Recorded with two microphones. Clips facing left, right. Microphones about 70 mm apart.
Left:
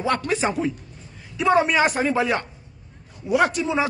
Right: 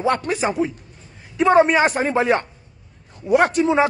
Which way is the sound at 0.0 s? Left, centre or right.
Right.